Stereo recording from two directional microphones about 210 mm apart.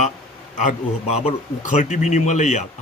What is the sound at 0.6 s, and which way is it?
A man's voice, 35° left (ahead or behind).